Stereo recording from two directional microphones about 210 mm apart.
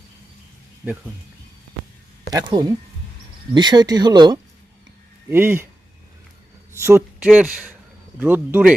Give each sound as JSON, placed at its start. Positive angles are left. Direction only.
{"t": 2.3, "sound": "speech", "side_deg": -20}
{"t": 6.7, "sound": "speech", "side_deg": -10}